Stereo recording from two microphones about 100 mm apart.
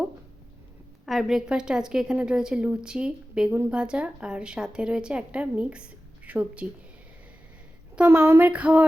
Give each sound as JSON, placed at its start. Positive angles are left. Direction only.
{"t": 1.0, "sound": "a woman's voice", "side_deg": 0}
{"t": 7.9, "sound": "a woman's voice", "side_deg": -20}